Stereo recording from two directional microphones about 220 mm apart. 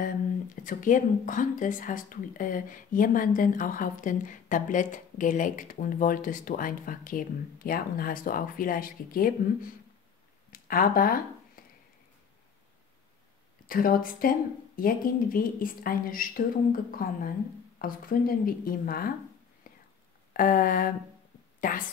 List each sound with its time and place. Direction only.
0.7 s speech: 35° left (ahead or behind)
10.5 s a sound: 40° left (ahead or behind)
13.7 s speech: 40° left (ahead or behind)
19.7 s whispering: 40° left (ahead or behind)
20.3 s speech: 40° left (ahead or behind)